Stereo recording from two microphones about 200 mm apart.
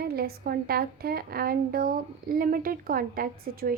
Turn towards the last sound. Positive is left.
turn(degrees=-45)  # may be behind; listen again after turning